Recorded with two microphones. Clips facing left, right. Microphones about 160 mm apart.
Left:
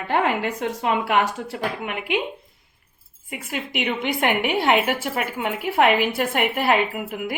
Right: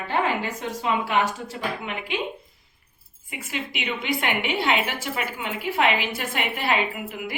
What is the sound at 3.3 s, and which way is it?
A woman's voice, 55° left (ahead or behind).